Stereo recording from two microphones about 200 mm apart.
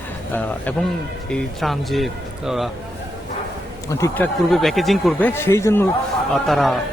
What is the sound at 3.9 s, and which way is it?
Speech, 15° left (ahead or behind).